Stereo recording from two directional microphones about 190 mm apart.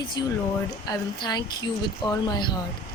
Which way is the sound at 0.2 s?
20° left (ahead or behind).